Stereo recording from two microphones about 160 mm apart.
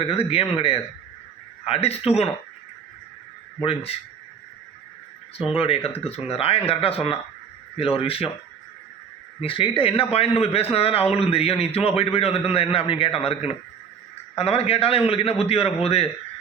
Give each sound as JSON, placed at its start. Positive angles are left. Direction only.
{"t": 0.0, "sound": "a man's voice", "side_deg": 35}
{"t": 3.6, "sound": "a man's voice", "side_deg": 35}
{"t": 5.5, "sound": "a man's voice", "side_deg": 35}
{"t": 9.4, "sound": "a man's voice", "side_deg": 35}
{"t": 14.3, "sound": "a man's voice", "side_deg": 40}